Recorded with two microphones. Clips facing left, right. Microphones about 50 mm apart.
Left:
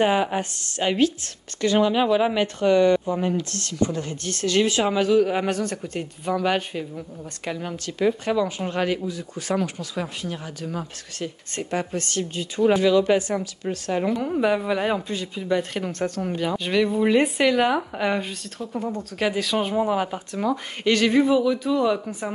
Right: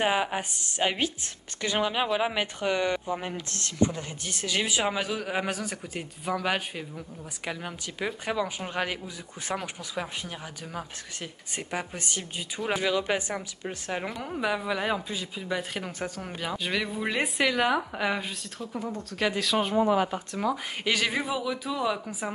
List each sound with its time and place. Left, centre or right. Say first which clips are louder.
0.0 s speech: left 5 dB; centre
0.4 s speech: left 2 dB; centre
3.4 s speech: left 2 dB; right
4.0 s speech: left 8 dB; centre
14.0 s speech: left 9 dB; centre